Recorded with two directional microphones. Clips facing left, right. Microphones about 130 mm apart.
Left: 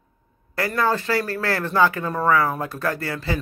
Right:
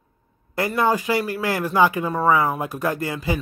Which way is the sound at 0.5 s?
20° right (ahead or behind).